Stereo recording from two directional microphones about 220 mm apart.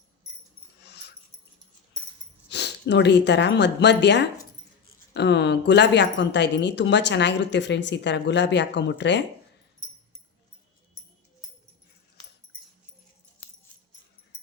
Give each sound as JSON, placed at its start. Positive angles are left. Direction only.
{"t": 0.9, "sound": "dog", "side_deg": 50}
{"t": 2.5, "sound": "a woman's voice", "side_deg": 50}